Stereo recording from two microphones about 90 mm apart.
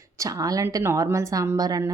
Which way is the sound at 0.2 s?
40° right (ahead or behind).